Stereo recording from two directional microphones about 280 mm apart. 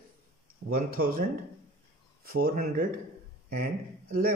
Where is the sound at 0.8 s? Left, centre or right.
Right.